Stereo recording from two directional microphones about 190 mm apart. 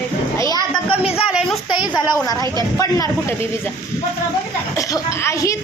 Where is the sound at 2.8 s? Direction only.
15° left (ahead or behind).